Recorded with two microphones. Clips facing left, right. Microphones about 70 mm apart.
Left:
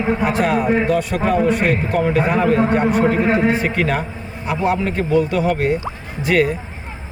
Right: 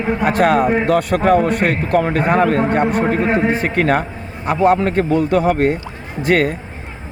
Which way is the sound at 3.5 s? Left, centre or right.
Right.